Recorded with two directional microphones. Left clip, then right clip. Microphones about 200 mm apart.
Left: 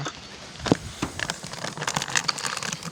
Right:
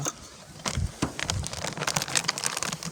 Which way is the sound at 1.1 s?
40° right (ahead or behind).